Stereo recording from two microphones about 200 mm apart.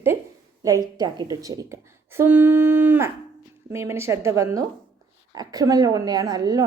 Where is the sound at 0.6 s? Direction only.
15° right (ahead or behind).